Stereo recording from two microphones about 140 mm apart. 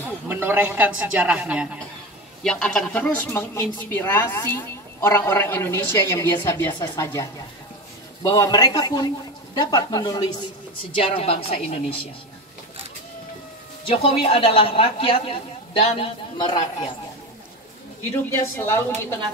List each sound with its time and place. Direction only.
0.0 s a man's voice: 15° right (ahead or behind)
2.4 s speech: 5° left (ahead or behind); by 10.2 s 30° left (ahead or behind)
11.0 s a woman's voice: 40° left (ahead or behind)
14.0 s speech: 45° left (ahead or behind)
15.8 s a woman's voice: 55° left (ahead or behind)
16.3 s speech: 30° left (ahead or behind)
18.1 s speech: 20° left (ahead or behind)